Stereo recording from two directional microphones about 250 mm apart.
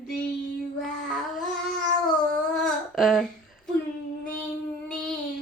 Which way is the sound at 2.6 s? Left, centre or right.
Centre.